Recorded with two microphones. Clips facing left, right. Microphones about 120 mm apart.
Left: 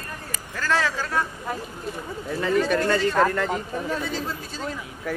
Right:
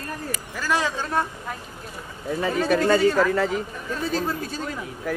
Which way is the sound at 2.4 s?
15° right (ahead or behind).